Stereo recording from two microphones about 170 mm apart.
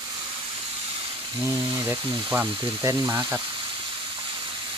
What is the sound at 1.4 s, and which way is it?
Speech, 10° right (ahead or behind).